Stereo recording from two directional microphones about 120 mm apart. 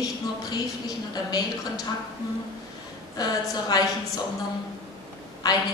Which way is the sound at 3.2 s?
30° left (ahead or behind).